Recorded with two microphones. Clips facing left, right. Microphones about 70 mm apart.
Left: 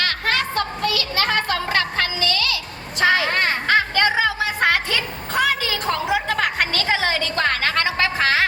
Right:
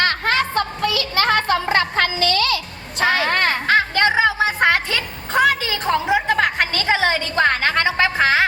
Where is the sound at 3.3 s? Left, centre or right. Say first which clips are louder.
Right 2 dB; right.